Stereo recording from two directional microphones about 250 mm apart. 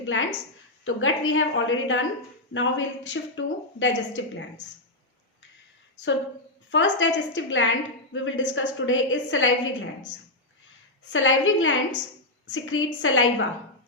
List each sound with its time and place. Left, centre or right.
0.0 s a woman's voice: left
6.7 s a woman's voice: left
11.1 s a woman's voice: left